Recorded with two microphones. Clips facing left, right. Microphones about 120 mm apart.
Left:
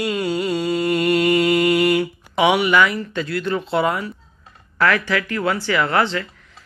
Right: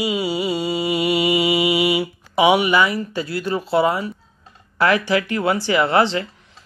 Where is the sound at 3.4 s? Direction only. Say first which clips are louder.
Right 3 dB; 5° right (ahead or behind).